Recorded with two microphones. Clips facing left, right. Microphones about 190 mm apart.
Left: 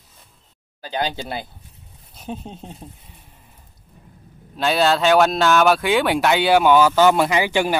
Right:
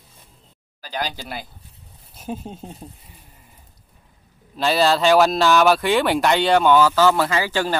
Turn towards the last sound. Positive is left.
turn(degrees=15)  # may be behind; listen again after turning